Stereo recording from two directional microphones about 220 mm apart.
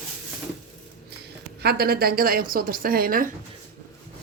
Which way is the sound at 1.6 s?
45° right (ahead or behind).